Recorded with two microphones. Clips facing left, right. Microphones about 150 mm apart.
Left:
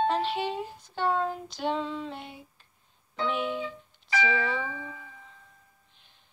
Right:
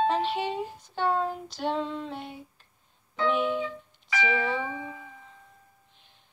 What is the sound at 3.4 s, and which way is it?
Music, 5° left (ahead or behind).